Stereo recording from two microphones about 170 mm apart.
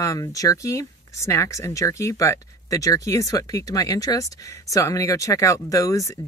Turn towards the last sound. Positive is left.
turn(degrees=20)  # may be behind; listen again after turning